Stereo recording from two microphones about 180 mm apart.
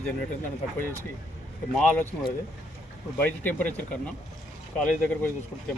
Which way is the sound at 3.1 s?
10° left (ahead or behind).